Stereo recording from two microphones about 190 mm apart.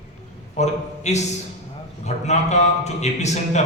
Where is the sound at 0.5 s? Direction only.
35° left (ahead or behind).